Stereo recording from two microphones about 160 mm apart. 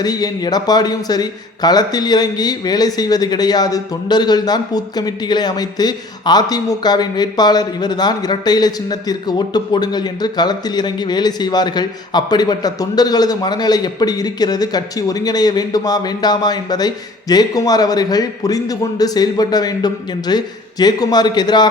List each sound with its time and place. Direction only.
0.0 s a man's voice: 25° left (ahead or behind)